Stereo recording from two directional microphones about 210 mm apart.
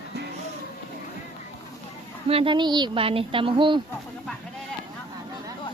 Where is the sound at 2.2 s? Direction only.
25° right (ahead or behind).